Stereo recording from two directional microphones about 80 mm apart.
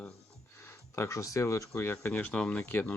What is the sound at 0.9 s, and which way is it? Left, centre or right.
Speech, left.